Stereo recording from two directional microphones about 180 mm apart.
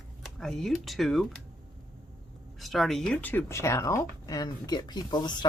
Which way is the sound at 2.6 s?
Centre (ahead or behind).